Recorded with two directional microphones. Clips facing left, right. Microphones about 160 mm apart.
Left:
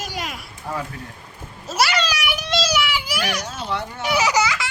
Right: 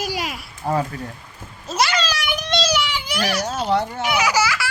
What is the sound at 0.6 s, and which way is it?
Speech, 45° right (ahead or behind).